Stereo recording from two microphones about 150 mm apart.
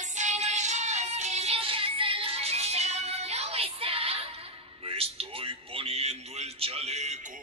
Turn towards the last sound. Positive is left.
turn(degrees=-50)  # may be behind; listen again after turning